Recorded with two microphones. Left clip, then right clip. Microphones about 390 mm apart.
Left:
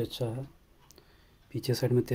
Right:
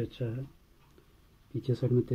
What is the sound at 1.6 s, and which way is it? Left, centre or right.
Speech, centre.